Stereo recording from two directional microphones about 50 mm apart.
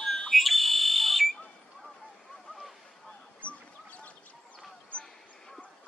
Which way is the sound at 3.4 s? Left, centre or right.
Left.